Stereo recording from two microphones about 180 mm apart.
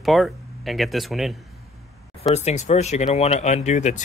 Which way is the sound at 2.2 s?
35° left (ahead or behind).